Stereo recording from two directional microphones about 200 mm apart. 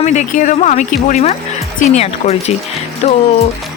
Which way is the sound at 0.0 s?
35° left (ahead or behind).